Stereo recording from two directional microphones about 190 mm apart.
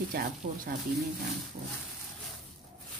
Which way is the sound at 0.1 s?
55° right (ahead or behind).